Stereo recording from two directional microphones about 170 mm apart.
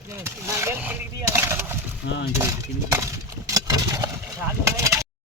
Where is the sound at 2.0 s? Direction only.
90° left.